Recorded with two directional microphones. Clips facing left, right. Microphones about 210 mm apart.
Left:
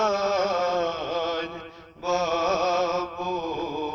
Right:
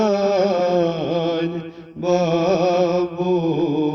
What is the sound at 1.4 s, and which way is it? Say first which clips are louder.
Mantra: right 10 dB; 30° right (ahead or behind).